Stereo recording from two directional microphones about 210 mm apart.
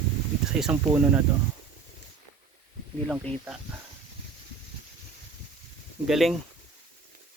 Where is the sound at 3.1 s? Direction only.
5° right (ahead or behind).